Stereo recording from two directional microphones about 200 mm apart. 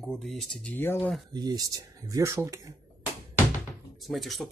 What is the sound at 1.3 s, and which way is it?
Speech, 20° right (ahead or behind).